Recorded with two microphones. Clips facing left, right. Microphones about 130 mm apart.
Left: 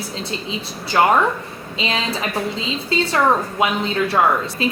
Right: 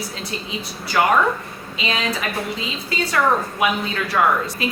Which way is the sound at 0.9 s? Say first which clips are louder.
Left 2 dB; 25° left (ahead or behind).